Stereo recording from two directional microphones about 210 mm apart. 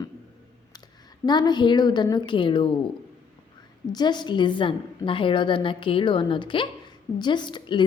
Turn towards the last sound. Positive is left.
turn(degrees=20)  # may be behind; listen again after turning